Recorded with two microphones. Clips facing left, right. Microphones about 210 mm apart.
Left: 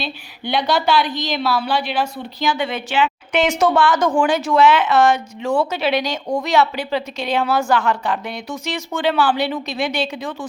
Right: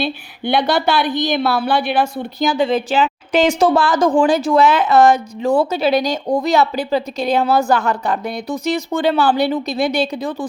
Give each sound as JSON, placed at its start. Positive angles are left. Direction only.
{"t": 0.0, "sound": "a woman's voice", "side_deg": -55}
{"t": 2.5, "sound": "a woman's voice", "side_deg": -35}